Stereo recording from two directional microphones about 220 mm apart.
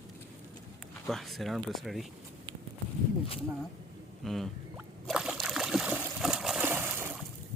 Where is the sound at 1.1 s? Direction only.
Centre (ahead or behind).